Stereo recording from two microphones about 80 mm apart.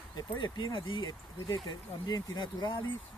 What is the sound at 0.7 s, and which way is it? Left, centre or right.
Speech, left.